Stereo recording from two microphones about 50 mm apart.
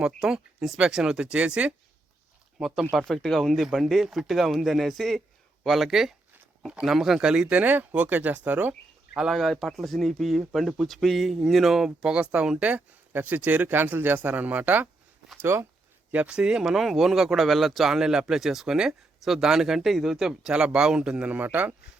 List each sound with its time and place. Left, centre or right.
0.2 s speech: centre
1.3 s a man's voice: right
2.6 s a man's voice: centre
3.1 s a man's voice: centre
4.0 s a man's voice: centre
7.5 s speech: right
9.1 s a man's voice: centre
11.9 s a man's voice: right
13.1 s speech: right
15.4 s speech: right
16.1 s speech: right; by 20.5 s centre
20.5 s a man's voice: centre
21.3 s speech: right